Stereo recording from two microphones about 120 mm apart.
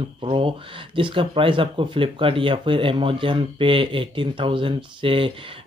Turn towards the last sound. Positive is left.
turn(degrees=-45)  # may be behind; listen again after turning